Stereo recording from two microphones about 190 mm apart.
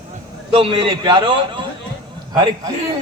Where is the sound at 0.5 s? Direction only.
30° right (ahead or behind).